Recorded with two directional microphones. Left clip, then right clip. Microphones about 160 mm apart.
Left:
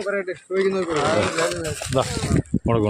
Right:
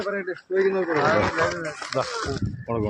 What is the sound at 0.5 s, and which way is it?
Speech, 25° left (ahead or behind).